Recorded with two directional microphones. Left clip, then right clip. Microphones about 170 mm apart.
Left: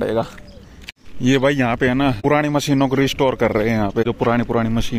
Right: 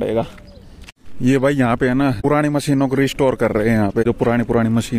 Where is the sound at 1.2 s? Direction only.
30° right (ahead or behind).